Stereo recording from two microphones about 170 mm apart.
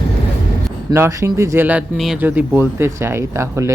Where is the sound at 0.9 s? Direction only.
15° right (ahead or behind).